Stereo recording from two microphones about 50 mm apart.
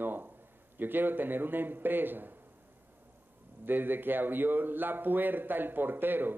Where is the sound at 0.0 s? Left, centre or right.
Right.